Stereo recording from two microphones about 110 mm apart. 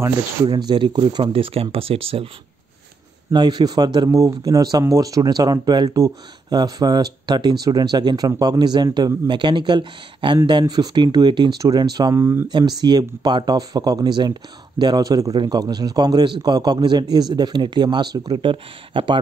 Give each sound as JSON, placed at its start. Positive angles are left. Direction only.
{"t": 0.5, "sound": "speech", "side_deg": -40}
{"t": 3.3, "sound": "a man's voice", "side_deg": -40}
{"t": 12.4, "sound": "speech", "side_deg": -40}